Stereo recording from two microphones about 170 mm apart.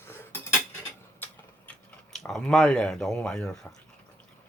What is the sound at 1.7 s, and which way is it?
Speech, 5° left (ahead or behind).